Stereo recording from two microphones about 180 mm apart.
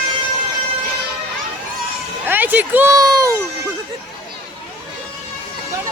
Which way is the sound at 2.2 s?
10° right (ahead or behind).